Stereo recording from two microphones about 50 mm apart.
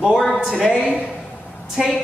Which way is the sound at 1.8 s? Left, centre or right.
Centre.